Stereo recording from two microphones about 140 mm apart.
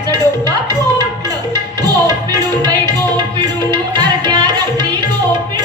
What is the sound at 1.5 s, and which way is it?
Music, 30° right (ahead or behind).